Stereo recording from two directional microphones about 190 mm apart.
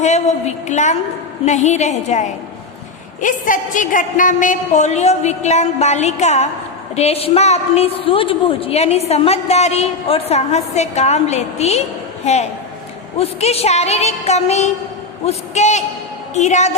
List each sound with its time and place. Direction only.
0.0 s a woman's voice: 35° left (ahead or behind)